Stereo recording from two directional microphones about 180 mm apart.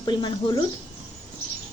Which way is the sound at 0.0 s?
25° left (ahead or behind).